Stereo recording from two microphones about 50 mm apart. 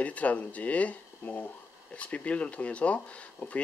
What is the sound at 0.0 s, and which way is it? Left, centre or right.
Speech, left.